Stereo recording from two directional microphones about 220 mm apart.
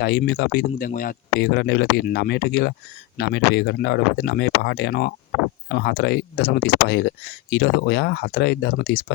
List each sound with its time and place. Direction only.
0.0 s speech: 50° left (ahead or behind)